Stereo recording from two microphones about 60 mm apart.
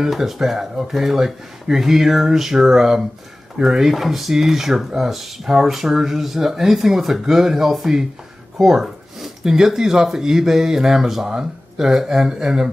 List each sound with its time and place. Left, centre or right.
0.0 s speech: centre